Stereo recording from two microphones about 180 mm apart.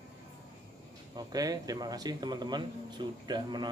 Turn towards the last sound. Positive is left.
turn(degrees=-25)  # may be behind; listen again after turning